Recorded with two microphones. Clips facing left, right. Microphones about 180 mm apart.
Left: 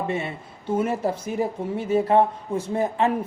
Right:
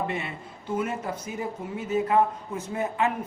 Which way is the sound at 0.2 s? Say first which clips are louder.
Left 4 dB; 30° left (ahead or behind).